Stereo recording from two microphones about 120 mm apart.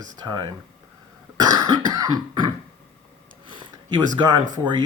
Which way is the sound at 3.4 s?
45° right (ahead or behind).